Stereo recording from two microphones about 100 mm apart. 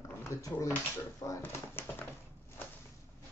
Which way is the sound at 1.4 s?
20° left (ahead or behind).